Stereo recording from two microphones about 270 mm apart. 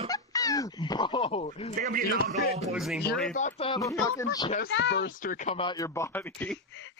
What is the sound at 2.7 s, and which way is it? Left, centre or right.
Speech, centre.